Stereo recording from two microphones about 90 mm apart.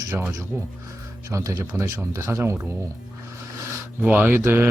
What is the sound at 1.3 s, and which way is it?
Speech, 35° right (ahead or behind).